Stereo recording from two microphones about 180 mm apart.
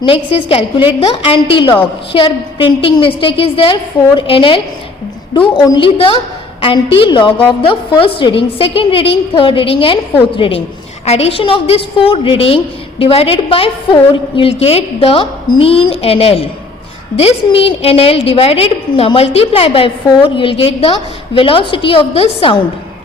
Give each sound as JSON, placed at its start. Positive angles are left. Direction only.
{"t": 0.0, "sound": "a woman's voice", "side_deg": 30}